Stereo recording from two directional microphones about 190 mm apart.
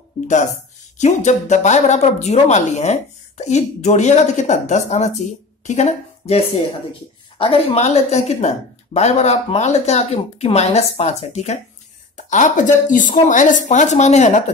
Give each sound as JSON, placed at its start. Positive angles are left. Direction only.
{"t": 0.9, "sound": "a woman's voice", "side_deg": 40}